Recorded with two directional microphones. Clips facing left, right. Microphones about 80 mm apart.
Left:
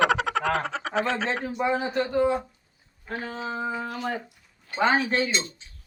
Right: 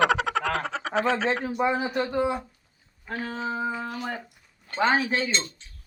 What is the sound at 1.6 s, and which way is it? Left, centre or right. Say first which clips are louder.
Speech: left 1 dB; centre.